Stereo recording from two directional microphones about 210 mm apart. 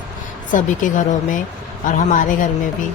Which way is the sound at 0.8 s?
40° left (ahead or behind).